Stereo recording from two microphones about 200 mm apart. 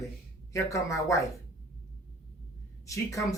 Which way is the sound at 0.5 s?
15° left (ahead or behind).